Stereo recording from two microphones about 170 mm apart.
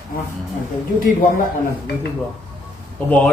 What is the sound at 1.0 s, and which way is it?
Speech, 55° left (ahead or behind).